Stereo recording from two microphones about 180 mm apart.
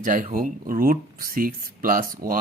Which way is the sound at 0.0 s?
45° right (ahead or behind).